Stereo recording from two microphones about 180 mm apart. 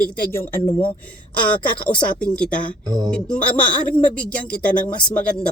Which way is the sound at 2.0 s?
5° left (ahead or behind).